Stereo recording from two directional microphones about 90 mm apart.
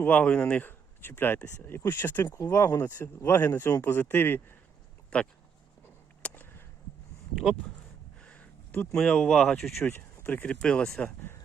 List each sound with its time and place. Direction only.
0.0 s speech: 15° left (ahead or behind)
5.1 s speech: 10° left (ahead or behind)
6.2 s a sound: 20° left (ahead or behind)
8.2 s speech: 15° left (ahead or behind)
9.8 s speech: 20° left (ahead or behind)